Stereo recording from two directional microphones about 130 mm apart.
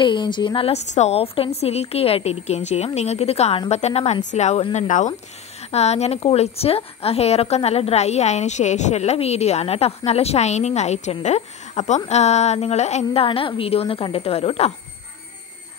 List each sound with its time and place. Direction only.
0.0 s a woman's voice: 35° left (ahead or behind)
0.9 s a woman's voice: 55° left (ahead or behind)
4.7 s speech: 70° left (ahead or behind)
5.7 s a woman's voice: 55° left (ahead or behind)